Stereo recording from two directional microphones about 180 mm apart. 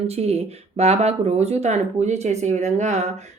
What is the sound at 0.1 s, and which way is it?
Speech, 35° right (ahead or behind).